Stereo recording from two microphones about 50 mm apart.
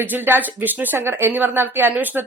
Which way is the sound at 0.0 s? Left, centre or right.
Right.